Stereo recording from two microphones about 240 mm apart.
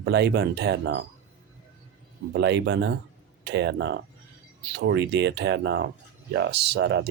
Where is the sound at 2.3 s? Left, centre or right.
Right.